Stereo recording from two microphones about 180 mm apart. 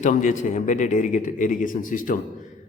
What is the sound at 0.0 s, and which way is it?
A man's voice, 45° left (ahead or behind).